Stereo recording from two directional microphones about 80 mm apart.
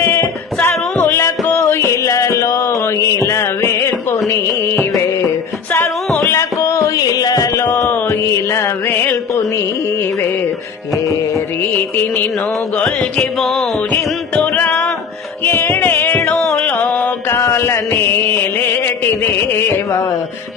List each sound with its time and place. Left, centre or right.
0.0 s a sound: left
1.0 s music: left
6.3 s music: left
11.1 s music: left
11.6 s music: left
12.7 s music: centre
13.9 s music: left
16.6 s mantra: centre